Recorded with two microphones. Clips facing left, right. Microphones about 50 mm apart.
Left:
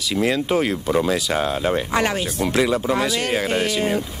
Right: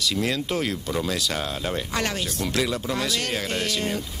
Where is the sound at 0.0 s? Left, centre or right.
Centre.